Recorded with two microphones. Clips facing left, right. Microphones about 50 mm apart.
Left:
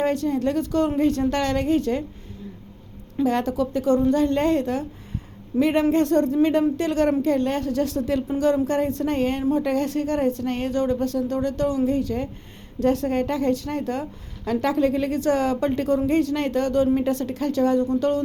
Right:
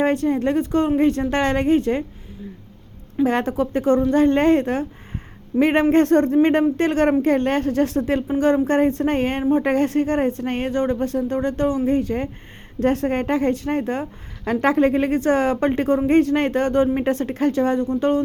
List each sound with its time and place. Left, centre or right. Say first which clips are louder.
0.0 s a woman's voice: right 3 dB; right
3.2 s speech: right 1 dB; right